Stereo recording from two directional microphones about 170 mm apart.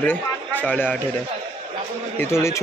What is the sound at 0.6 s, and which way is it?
Speech, 10° left (ahead or behind).